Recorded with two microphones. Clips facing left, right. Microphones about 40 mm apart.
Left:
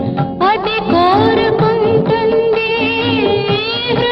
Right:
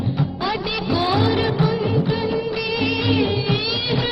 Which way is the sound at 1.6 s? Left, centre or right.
Left.